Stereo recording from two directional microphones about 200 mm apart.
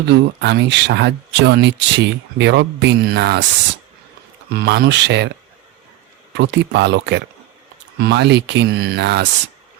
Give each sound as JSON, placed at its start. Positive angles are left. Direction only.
{"t": 0.0, "sound": "speech", "side_deg": -60}
{"t": 4.4, "sound": "speech", "side_deg": -55}
{"t": 6.3, "sound": "speech", "side_deg": -60}